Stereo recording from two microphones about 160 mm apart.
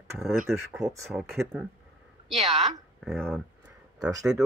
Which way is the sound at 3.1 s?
Centre (ahead or behind).